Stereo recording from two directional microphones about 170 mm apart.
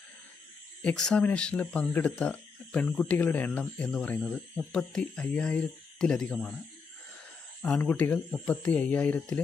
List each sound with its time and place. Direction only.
0.8 s speech: 5° left (ahead or behind)
7.6 s speech: 5° left (ahead or behind)